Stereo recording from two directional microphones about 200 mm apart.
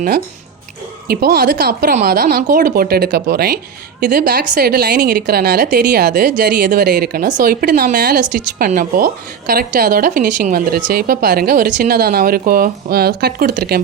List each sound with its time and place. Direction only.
1.0 s a woman's voice: 50° right (ahead or behind)
8.2 s a woman's voice: 45° right (ahead or behind)